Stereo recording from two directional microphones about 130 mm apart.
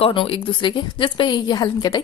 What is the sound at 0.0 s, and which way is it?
Speech, 45° left (ahead or behind).